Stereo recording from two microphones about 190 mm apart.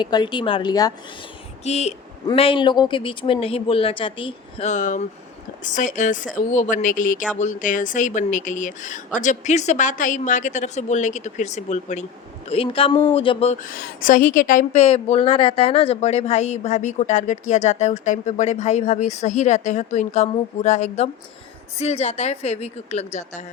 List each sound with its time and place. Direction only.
0.0 s speech: 25° left (ahead or behind)
1.6 s a woman's voice: 35° left (ahead or behind)